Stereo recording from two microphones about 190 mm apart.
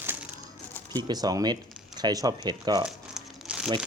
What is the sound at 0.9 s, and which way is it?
Speech, 20° right (ahead or behind).